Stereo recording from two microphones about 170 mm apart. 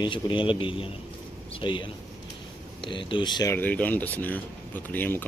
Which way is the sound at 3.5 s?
10° left (ahead or behind).